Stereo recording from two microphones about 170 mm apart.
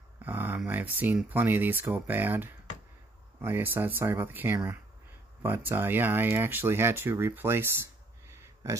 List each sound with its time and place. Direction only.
0.2 s speech: 10° right (ahead or behind)